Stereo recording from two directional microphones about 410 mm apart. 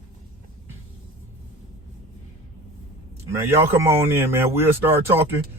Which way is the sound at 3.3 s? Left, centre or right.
Centre.